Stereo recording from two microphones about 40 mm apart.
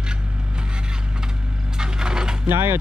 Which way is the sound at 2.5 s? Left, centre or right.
Right.